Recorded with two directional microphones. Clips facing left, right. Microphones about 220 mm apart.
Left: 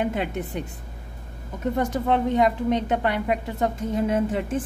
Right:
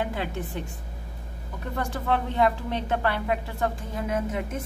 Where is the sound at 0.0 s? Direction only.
20° left (ahead or behind).